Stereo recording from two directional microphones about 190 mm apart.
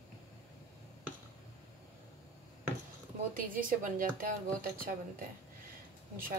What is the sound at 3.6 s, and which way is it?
Speech, 45° right (ahead or behind).